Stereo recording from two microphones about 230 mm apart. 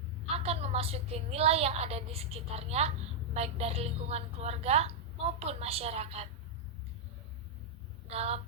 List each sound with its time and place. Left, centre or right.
0.3 s a woman's voice: right
8.0 s speech: right